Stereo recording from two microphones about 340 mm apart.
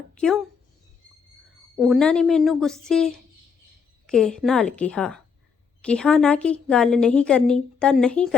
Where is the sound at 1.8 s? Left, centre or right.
Centre.